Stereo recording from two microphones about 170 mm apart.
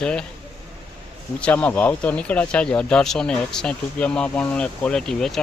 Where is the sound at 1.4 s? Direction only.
10° left (ahead or behind).